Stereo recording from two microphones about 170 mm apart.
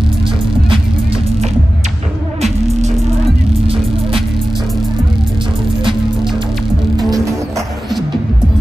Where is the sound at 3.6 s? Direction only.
35° right (ahead or behind).